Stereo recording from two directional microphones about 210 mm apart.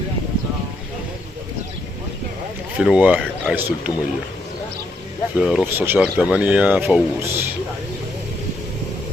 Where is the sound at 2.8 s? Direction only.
5° right (ahead or behind).